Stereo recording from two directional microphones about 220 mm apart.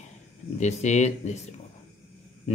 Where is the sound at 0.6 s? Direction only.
30° left (ahead or behind).